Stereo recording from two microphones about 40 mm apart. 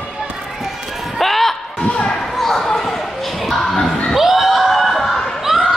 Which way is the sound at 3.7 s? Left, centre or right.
Left.